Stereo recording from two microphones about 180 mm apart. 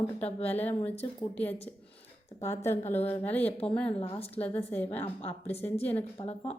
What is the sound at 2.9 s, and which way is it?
Speech, 10° left (ahead or behind).